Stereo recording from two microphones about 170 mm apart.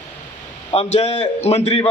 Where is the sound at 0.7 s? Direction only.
40° left (ahead or behind).